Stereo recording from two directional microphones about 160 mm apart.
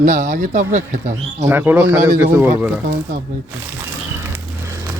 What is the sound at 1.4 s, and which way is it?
Speech, 10° right (ahead or behind).